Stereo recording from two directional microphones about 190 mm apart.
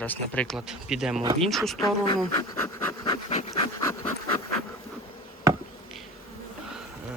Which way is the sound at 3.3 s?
35° left (ahead or behind).